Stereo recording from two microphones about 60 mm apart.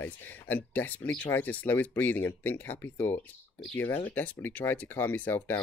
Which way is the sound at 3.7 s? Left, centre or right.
Left.